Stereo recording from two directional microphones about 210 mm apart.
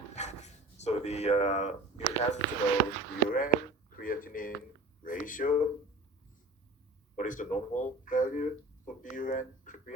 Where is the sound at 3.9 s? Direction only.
40° left (ahead or behind).